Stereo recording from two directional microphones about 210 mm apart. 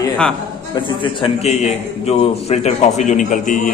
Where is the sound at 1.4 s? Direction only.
30° left (ahead or behind).